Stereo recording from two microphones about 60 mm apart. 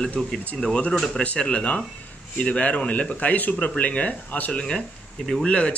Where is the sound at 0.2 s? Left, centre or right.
Centre.